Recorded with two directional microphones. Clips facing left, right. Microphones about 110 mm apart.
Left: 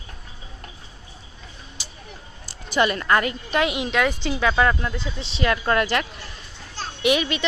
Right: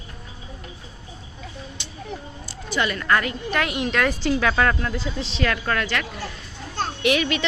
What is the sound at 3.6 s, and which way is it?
Speech, 10° left (ahead or behind).